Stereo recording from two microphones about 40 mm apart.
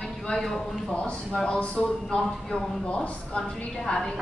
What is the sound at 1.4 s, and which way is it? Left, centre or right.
A woman's voice, left.